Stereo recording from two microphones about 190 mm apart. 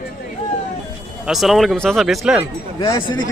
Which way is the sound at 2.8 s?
20° left (ahead or behind).